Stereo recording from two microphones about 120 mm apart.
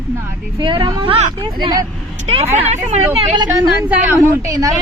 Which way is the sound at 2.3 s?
55° right (ahead or behind).